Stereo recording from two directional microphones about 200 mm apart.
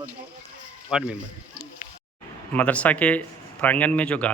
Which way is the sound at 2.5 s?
5° left (ahead or behind).